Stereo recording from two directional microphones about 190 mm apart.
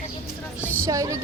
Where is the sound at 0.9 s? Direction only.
15° right (ahead or behind).